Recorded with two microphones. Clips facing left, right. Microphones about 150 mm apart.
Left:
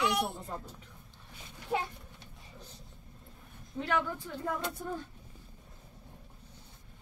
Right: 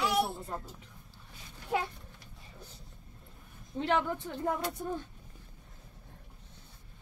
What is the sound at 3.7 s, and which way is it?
Speech, 25° right (ahead or behind).